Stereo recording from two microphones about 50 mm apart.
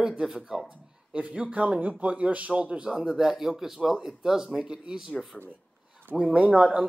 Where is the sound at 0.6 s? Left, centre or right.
Right.